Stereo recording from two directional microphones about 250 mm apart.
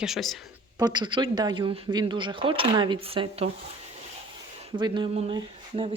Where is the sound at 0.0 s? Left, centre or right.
Centre.